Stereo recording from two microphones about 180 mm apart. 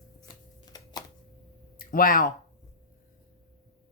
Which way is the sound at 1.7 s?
50° left (ahead or behind).